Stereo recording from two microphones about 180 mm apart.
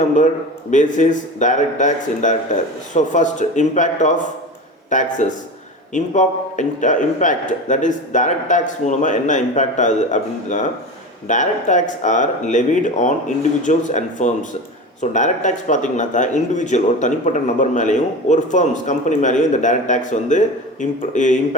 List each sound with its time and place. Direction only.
0.0 s a man's voice: 45° left (ahead or behind)